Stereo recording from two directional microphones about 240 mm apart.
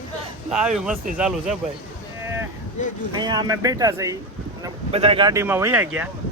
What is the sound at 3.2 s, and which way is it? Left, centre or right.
A man's voice, centre.